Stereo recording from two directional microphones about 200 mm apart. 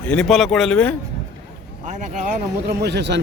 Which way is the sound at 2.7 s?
55° right (ahead or behind).